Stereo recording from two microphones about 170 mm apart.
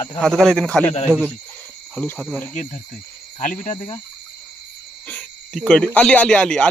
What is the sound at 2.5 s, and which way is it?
Speech, 45° left (ahead or behind).